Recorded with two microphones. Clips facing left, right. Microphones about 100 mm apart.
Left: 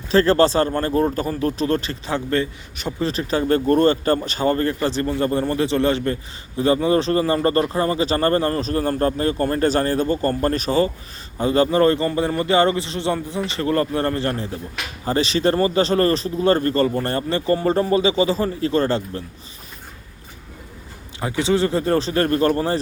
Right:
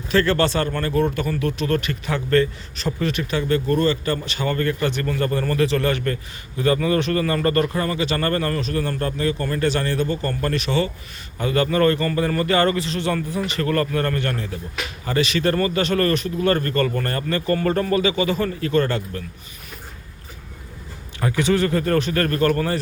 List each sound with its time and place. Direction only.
0.1 s speech: 35° left (ahead or behind); by 3.1 s 15° left (ahead or behind)
3.1 s speech: 35° left (ahead or behind)
21.2 s speech: 20° left (ahead or behind)